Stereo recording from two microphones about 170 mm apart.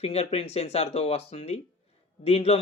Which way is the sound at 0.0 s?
35° left (ahead or behind).